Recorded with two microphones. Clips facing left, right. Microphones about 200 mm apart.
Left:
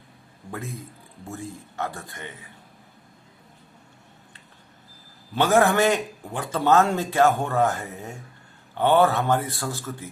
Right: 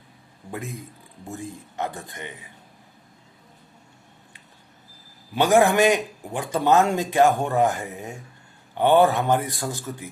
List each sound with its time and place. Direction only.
0.5 s a man's voice: 15° right (ahead or behind)
5.3 s a man's voice: 15° right (ahead or behind)